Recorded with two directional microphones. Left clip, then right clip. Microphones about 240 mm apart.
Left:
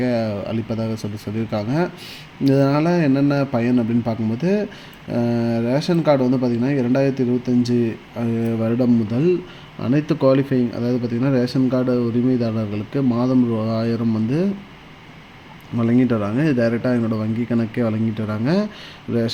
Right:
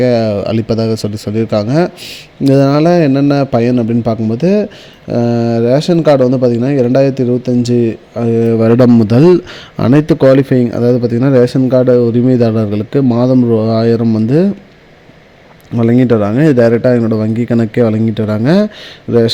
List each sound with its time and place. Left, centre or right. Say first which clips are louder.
0.0 s speech: right 11 dB; right
15.8 s speech: right 9 dB; right